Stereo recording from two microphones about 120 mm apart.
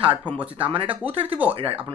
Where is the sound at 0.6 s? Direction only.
50° right (ahead or behind).